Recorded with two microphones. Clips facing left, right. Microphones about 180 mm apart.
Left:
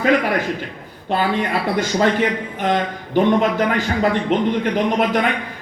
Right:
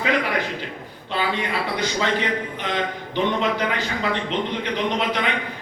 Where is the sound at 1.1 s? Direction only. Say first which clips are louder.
Left 5 dB; 50° left (ahead or behind).